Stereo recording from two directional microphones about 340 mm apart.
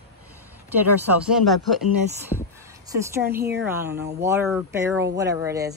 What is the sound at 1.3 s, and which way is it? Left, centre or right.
Speech, centre.